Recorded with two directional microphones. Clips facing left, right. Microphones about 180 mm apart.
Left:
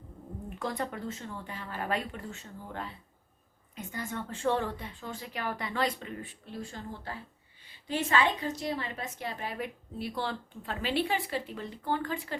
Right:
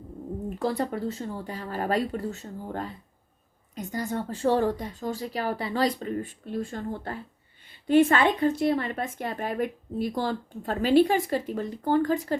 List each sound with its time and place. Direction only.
0.6 s a woman's voice: 35° right (ahead or behind)